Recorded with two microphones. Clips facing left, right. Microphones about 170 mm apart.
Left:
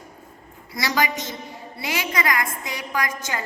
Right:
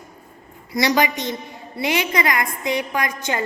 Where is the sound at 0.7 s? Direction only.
20° right (ahead or behind).